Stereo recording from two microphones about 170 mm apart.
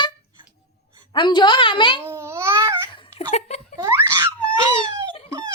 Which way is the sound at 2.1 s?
15° right (ahead or behind).